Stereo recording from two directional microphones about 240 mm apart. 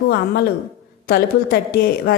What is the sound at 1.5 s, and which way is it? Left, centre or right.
Speech, left.